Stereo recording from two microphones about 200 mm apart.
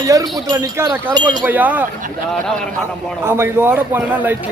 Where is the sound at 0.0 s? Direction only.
20° right (ahead or behind).